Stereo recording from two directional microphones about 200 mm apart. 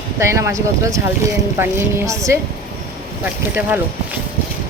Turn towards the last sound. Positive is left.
turn(degrees=-10)  # may be behind; listen again after turning